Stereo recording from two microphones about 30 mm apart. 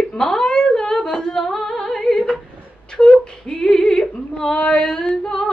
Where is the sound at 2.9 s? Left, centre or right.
Centre.